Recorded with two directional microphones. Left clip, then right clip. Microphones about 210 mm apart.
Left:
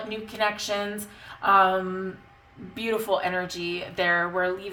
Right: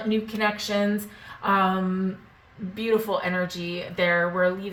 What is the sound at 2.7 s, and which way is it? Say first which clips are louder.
Speech: right 1 dB; 45° left (ahead or behind).